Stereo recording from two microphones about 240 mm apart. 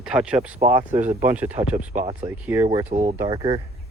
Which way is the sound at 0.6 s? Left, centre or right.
Right.